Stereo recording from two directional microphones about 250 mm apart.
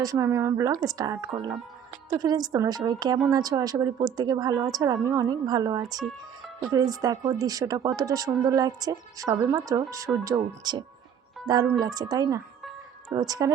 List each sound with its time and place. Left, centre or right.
0.0 s speech: centre